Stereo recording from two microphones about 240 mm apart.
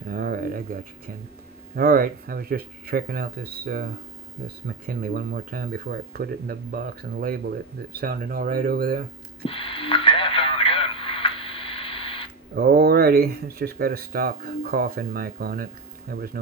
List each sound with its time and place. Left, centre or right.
0.1 s a sound: right
1.7 s speech: right
4.9 s speech: right
9.4 s radio: left
12.5 s speech: right